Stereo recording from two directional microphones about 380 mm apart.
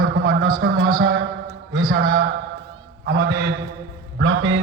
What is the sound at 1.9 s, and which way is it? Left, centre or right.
A man's voice, right.